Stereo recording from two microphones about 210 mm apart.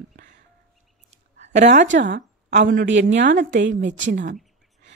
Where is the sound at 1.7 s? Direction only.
35° right (ahead or behind).